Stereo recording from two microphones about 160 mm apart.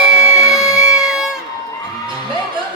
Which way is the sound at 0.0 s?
5° right (ahead or behind).